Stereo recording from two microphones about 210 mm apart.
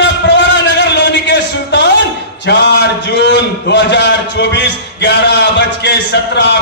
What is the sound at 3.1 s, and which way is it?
A man's voice, 55° left (ahead or behind).